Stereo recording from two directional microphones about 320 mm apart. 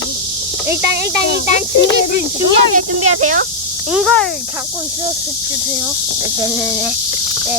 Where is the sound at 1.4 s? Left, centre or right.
Left.